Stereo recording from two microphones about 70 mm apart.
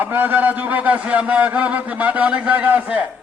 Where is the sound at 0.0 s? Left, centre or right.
Right.